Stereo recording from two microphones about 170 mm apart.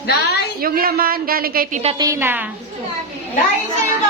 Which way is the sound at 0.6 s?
60° right (ahead or behind).